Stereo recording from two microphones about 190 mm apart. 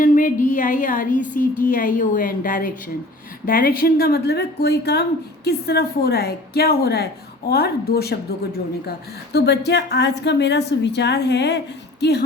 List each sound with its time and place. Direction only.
0.0 s a sound: 45° left (ahead or behind)
3.4 s a woman's voice: 50° left (ahead or behind)
9.3 s a woman's voice: 60° left (ahead or behind)